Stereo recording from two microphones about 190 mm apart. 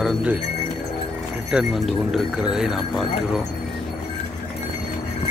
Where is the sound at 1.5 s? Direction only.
Centre (ahead or behind).